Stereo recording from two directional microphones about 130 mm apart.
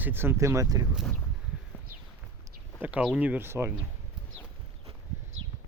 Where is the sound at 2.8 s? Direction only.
10° right (ahead or behind).